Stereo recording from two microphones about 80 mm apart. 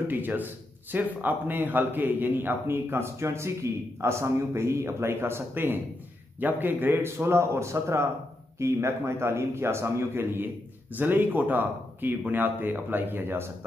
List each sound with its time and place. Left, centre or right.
0.1 s a man's voice: right